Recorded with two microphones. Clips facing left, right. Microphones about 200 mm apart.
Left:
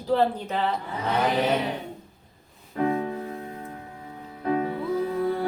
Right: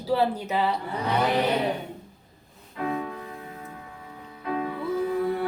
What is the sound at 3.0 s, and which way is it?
Music, 25° left (ahead or behind).